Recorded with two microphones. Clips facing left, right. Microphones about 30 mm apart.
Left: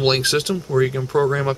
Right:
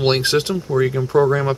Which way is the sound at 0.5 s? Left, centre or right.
Centre.